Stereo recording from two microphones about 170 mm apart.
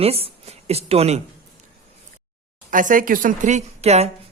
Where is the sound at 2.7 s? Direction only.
50° right (ahead or behind).